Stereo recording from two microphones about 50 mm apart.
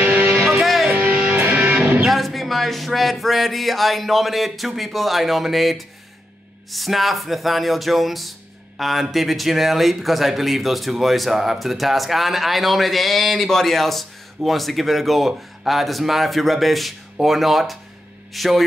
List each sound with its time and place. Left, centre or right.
0.0 s music: right
0.6 s music: centre
0.9 s music: right
2.0 s a man's voice: centre